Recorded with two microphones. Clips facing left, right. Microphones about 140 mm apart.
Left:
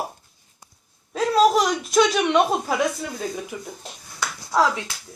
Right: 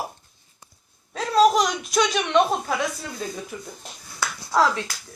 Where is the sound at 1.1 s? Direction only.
5° left (ahead or behind).